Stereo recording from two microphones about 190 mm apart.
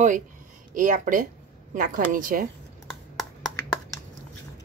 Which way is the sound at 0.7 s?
45° right (ahead or behind).